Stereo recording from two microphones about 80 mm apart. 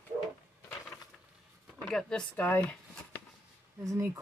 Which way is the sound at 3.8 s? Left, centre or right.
Right.